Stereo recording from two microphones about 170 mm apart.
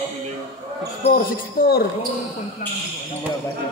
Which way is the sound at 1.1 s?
55° left (ahead or behind).